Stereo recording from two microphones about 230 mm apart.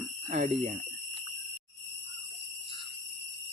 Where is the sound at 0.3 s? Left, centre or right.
Right.